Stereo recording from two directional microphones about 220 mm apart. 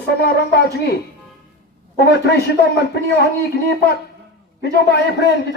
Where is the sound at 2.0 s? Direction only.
45° left (ahead or behind).